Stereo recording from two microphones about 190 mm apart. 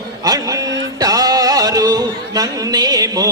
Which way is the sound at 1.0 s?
20° right (ahead or behind).